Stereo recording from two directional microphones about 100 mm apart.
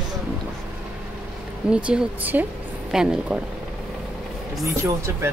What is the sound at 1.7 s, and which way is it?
Speech, 10° right (ahead or behind).